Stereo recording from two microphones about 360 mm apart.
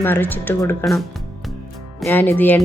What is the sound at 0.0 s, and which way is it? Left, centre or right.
Speech, centre.